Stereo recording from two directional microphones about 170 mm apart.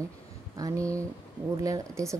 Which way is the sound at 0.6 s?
20° right (ahead or behind).